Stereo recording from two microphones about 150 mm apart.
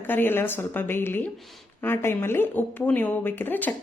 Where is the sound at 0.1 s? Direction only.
15° left (ahead or behind).